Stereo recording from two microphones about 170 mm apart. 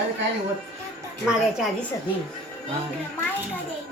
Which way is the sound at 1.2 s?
Centre (ahead or behind).